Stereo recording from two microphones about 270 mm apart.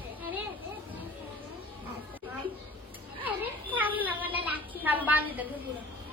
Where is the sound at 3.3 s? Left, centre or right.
Centre.